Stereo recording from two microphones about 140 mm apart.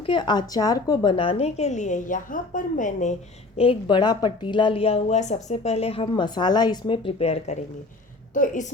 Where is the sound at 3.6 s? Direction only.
40° left (ahead or behind).